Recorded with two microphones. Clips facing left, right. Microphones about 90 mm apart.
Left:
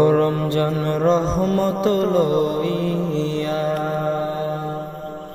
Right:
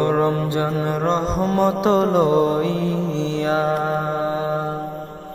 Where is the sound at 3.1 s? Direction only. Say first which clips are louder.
Right 1 dB; 90° right.